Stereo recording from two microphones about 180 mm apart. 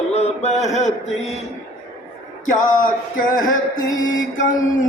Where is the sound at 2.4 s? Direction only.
45° left (ahead or behind).